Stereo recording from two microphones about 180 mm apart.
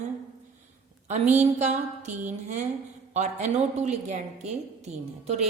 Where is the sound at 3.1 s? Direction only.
40° right (ahead or behind).